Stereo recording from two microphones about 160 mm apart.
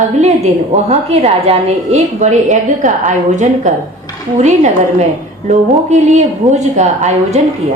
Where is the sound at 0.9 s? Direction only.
40° right (ahead or behind).